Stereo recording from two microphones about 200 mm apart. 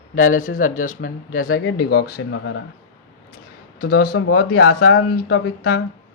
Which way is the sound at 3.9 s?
50° left (ahead or behind).